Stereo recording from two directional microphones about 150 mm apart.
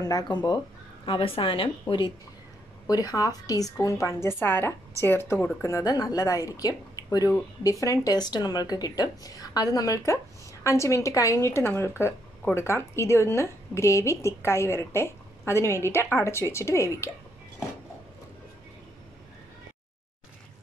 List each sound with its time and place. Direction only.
0.0 s a woman's voice: 25° left (ahead or behind)